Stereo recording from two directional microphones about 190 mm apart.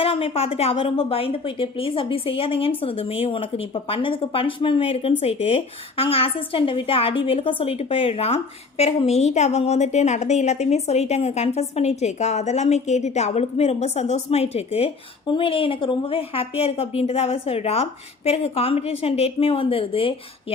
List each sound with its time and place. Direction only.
0.0 s a woman's voice: 30° left (ahead or behind)